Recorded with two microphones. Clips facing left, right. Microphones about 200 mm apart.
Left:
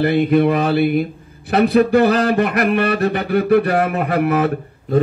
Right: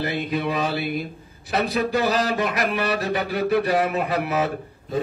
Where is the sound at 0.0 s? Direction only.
55° left (ahead or behind).